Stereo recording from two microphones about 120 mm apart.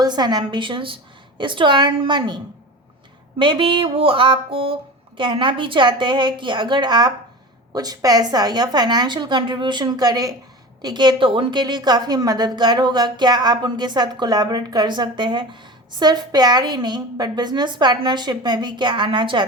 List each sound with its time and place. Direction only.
0.0 s a woman's voice: 35° right (ahead or behind)